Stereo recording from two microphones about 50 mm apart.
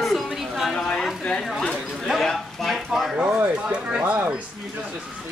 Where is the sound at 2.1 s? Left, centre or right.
Centre.